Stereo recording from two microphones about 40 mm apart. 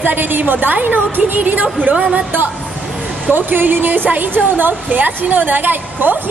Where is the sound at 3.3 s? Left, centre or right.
Right.